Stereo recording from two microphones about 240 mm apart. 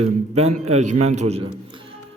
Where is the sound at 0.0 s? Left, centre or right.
Right.